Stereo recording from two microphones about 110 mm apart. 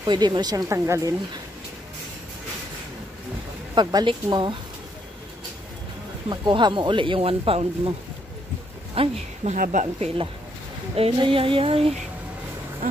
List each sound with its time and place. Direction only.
0.0 s speech: 40° right (ahead or behind); by 1.1 s 25° right (ahead or behind)
3.7 s speech: 45° right (ahead or behind)
6.2 s speech: 45° right (ahead or behind); by 7.9 s 60° right (ahead or behind)
8.9 s speech: 65° right (ahead or behind); by 10.1 s 85° right
11.1 s a sound: 50° right (ahead or behind)